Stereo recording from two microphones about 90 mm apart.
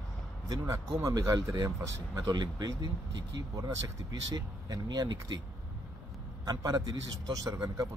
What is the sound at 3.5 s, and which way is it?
Speech, 40° right (ahead or behind).